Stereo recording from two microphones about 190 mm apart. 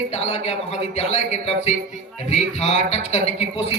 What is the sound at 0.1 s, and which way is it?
A man's voice, 35° left (ahead or behind).